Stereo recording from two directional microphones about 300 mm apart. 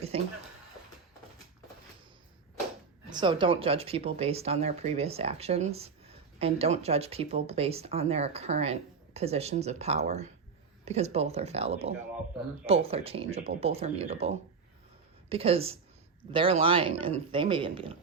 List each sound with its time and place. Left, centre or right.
0.1 s speech: centre
3.1 s speech: centre